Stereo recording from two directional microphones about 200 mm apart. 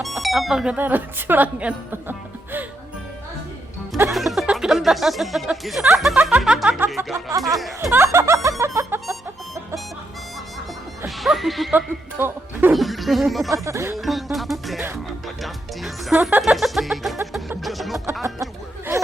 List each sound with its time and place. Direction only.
0.0 s speech: centre (ahead or behind)
4.1 s speech: centre (ahead or behind); by 7.6 s 15° right (ahead or behind)
7.8 s music: 10° right (ahead or behind)
11.2 s speech: centre (ahead or behind)
13.5 s speech: 15° right (ahead or behind)
13.9 s speech: centre (ahead or behind)
17.6 s music: centre (ahead or behind)